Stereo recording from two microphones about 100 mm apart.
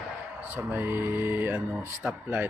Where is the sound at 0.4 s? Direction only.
20° right (ahead or behind).